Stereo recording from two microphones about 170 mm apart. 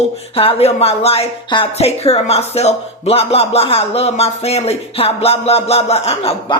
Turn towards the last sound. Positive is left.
turn(degrees=35)  # may be behind; listen again after turning